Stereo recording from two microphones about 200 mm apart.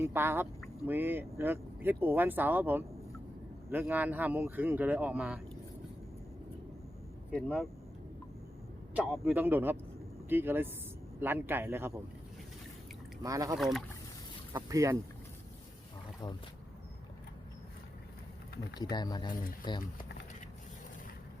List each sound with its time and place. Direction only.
0.0 s speech: 10° right (ahead or behind)
7.3 s speech: 5° left (ahead or behind)
9.0 s speech: 5° right (ahead or behind)
13.2 s speech: 15° right (ahead or behind)
13.6 s speech: centre (ahead or behind)
14.5 s speech: 15° right (ahead or behind)
18.8 s speech: 20° left (ahead or behind)